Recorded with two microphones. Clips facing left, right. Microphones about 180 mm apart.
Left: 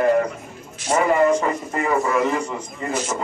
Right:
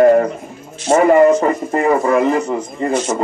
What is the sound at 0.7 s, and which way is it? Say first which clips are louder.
Speech: right 8 dB; 25° right (ahead or behind).